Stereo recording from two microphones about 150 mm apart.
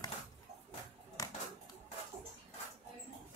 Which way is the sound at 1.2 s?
25° left (ahead or behind).